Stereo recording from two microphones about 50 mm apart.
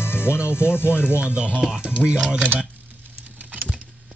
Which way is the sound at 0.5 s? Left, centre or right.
Left.